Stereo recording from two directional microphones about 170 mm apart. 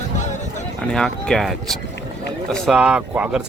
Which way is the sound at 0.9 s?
5° left (ahead or behind).